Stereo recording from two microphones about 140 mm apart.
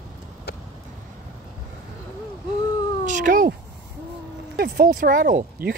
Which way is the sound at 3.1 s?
80° right.